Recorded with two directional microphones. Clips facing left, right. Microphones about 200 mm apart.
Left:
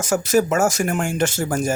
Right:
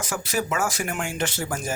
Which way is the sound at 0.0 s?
45° left (ahead or behind).